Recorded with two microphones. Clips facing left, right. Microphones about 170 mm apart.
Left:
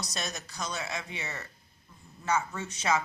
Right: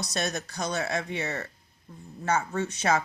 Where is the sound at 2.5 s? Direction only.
55° right (ahead or behind).